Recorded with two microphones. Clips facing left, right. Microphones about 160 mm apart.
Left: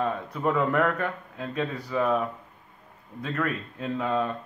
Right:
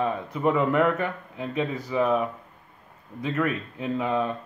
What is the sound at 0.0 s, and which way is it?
Speech, 5° right (ahead or behind).